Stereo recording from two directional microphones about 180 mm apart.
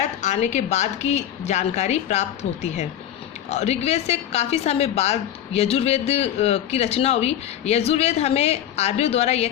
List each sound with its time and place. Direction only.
0.0 s a woman's voice: 40° left (ahead or behind)